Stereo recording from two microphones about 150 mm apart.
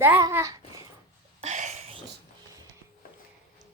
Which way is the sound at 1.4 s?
50° right (ahead or behind).